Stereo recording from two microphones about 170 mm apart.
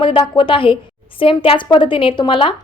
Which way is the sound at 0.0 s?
30° left (ahead or behind).